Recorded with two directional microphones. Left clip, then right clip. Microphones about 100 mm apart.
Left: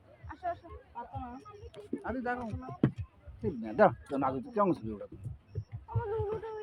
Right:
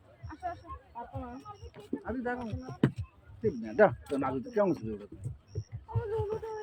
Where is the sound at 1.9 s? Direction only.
10° left (ahead or behind).